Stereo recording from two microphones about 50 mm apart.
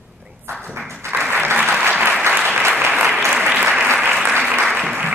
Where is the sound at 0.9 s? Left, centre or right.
Right.